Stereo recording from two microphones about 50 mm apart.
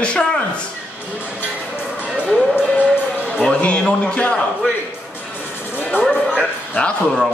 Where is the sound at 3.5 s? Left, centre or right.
Left.